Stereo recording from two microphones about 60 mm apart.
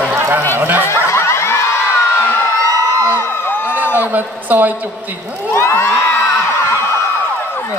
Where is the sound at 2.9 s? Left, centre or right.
Left.